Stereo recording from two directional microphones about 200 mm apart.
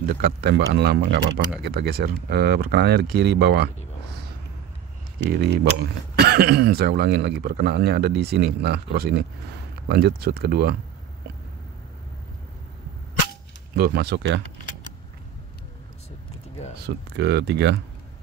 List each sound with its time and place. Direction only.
0.1 s speech: 50° right (ahead or behind)
5.3 s speech: 55° right (ahead or behind)
13.7 s speech: 50° right (ahead or behind)
16.7 s speech: 55° right (ahead or behind)